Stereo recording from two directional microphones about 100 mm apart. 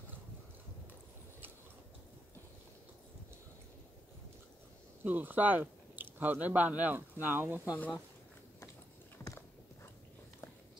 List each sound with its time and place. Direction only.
5.0 s speech: 20° right (ahead or behind)
7.7 s speech: 15° left (ahead or behind)